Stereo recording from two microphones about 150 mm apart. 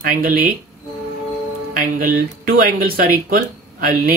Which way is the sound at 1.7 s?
65° right (ahead or behind).